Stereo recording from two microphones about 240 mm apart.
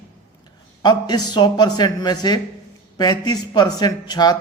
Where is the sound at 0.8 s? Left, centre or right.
Centre.